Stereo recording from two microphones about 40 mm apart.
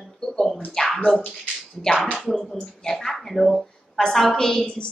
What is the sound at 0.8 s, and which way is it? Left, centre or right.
Speech, centre.